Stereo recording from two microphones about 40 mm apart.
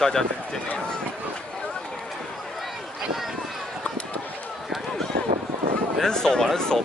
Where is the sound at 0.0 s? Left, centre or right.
Centre.